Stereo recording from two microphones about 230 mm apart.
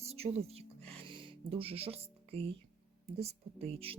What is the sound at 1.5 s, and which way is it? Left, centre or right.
A woman's voice, right.